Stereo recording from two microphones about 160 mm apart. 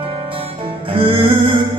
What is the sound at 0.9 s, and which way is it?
Music, 35° right (ahead or behind).